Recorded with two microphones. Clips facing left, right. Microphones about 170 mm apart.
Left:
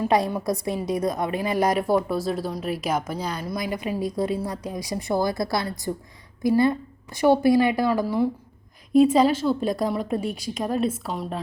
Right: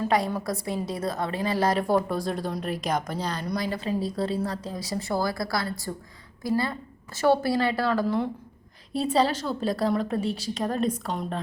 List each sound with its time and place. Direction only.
0.0 s speech: 20° left (ahead or behind)